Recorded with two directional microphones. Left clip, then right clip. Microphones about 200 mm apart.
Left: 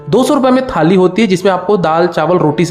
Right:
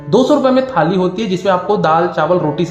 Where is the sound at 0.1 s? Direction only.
35° left (ahead or behind).